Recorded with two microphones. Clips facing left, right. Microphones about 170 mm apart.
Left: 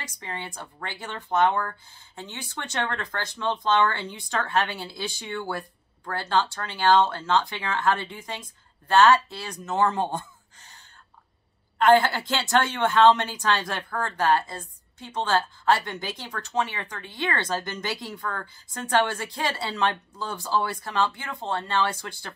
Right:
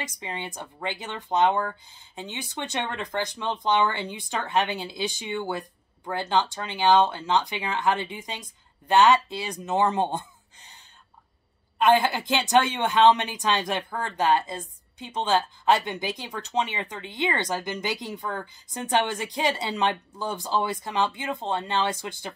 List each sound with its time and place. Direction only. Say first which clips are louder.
0.0 s a woman's voice: right 2 dB; 20° right (ahead or behind)
11.8 s a woman's voice: left 2 dB; 15° right (ahead or behind)